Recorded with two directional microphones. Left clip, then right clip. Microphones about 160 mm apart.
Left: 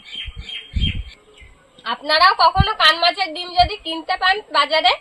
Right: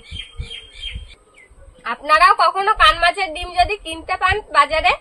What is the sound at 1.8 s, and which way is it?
A woman's voice, 15° right (ahead or behind).